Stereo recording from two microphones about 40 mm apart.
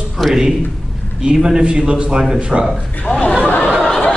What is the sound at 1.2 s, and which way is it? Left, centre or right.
Speech, right.